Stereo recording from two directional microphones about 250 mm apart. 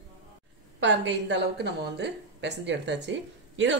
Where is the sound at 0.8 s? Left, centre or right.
Right.